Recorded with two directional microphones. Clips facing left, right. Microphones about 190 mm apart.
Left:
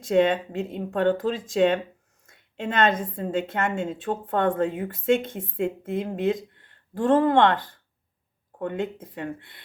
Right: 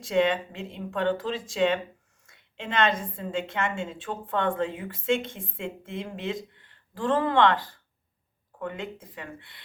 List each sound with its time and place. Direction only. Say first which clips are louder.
0.1 s a woman's voice: left 4 dB; 45° left (ahead or behind)
8.6 s a woman's voice: left 6 dB; 55° left (ahead or behind)